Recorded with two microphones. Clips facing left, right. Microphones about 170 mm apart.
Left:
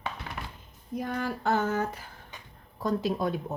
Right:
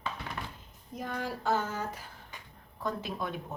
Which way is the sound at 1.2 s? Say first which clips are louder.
Left 3 dB; 60° left (ahead or behind).